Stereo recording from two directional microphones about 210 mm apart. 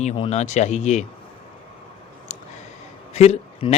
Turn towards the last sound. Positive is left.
turn(degrees=30)  # may be behind; listen again after turning